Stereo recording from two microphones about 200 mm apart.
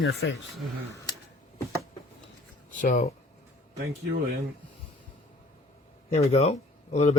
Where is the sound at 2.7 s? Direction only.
40° left (ahead or behind).